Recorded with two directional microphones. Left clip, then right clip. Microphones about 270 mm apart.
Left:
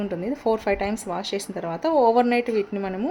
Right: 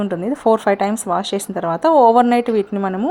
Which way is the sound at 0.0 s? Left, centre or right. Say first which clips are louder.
Right 7 dB; centre.